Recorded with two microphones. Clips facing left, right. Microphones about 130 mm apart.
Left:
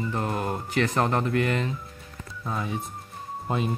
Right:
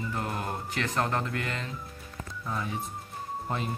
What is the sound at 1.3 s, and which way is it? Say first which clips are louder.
Speech: left 9 dB; 65° left (ahead or behind).